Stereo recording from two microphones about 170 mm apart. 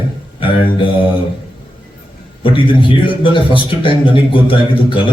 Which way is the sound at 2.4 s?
30° left (ahead or behind).